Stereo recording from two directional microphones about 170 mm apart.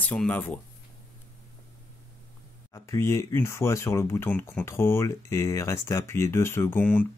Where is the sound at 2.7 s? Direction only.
15° left (ahead or behind).